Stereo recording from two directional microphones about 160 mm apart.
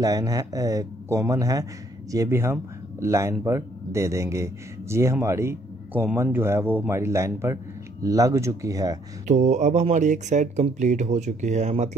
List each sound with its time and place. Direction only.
0.0 s speech: 25° right (ahead or behind)
9.3 s speech: 45° right (ahead or behind)